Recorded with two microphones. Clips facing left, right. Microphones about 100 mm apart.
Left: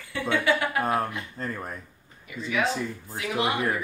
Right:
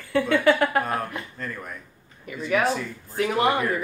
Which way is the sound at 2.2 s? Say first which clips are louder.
Right 4 dB; 50° right (ahead or behind).